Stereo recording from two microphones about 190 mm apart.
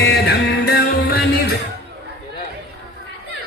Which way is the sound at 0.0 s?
65° left (ahead or behind).